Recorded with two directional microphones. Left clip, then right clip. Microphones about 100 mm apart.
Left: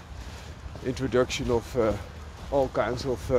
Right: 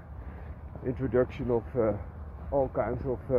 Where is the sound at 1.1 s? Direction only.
90° left.